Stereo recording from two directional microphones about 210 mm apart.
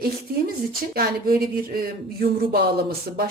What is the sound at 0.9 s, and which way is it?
Speech, 45° right (ahead or behind).